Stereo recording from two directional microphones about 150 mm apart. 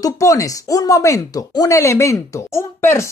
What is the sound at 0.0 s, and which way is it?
Speech, 20° left (ahead or behind).